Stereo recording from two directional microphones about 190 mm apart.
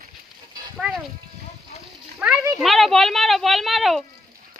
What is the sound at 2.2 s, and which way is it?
Speech, 5° right (ahead or behind).